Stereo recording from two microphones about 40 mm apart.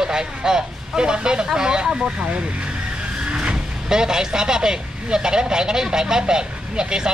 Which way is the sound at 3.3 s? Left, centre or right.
Centre.